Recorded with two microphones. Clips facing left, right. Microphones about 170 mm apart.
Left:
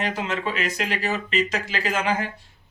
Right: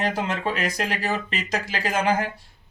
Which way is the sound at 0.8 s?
40° right (ahead or behind).